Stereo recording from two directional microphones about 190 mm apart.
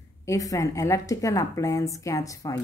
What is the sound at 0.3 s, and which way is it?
A woman's voice, 15° left (ahead or behind).